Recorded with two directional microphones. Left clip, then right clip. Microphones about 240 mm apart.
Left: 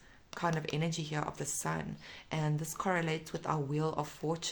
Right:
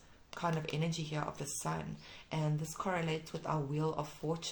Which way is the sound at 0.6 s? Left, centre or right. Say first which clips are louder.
Left 2 dB; left.